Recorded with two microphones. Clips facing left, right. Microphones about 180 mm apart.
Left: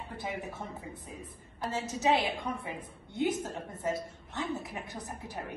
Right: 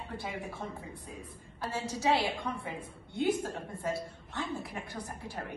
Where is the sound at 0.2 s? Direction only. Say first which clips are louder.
Left 4 dB; 20° left (ahead or behind).